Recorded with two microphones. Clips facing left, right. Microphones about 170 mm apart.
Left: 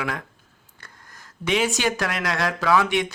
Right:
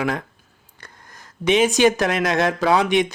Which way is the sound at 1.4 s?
20° right (ahead or behind).